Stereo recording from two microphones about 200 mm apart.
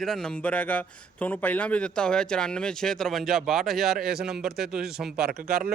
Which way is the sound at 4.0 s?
50° right (ahead or behind).